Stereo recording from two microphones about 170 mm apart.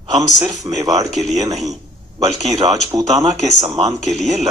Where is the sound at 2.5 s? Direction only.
20° right (ahead or behind).